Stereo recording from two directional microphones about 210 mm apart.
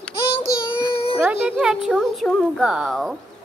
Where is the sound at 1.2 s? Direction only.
5° right (ahead or behind).